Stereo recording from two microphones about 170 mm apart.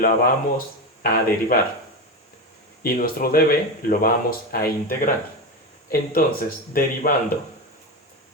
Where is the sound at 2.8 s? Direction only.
60° left (ahead or behind).